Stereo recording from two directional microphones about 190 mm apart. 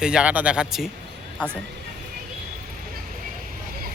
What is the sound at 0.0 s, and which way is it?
Speech, 5° right (ahead or behind).